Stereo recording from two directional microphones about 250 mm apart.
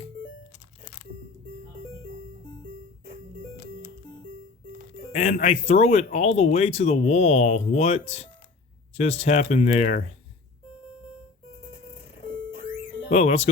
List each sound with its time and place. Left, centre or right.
5.1 s speech: left
13.1 s speech: left